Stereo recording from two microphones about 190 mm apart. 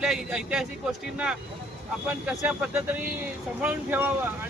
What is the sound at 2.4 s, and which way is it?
Speech, 10° right (ahead or behind).